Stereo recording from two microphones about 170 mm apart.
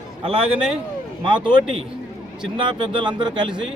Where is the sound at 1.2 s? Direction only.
30° right (ahead or behind).